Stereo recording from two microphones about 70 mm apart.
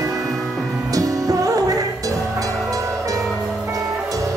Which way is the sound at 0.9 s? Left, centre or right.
Right.